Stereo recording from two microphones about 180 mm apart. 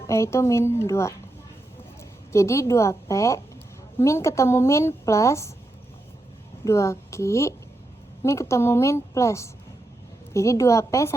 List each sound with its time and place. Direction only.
0.1 s a woman's voice: 15° left (ahead or behind)
2.3 s a woman's voice: 15° left (ahead or behind)
6.7 s a woman's voice: 15° left (ahead or behind)